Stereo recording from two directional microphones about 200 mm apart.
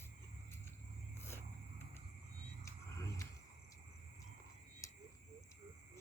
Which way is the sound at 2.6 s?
15° left (ahead or behind).